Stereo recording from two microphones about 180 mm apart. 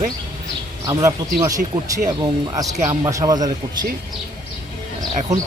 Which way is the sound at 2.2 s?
20° right (ahead or behind).